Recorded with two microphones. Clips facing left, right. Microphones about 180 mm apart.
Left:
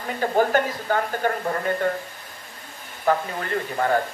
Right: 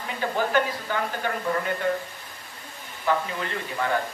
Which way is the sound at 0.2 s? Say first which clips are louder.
Left 4 dB; 45° left (ahead or behind).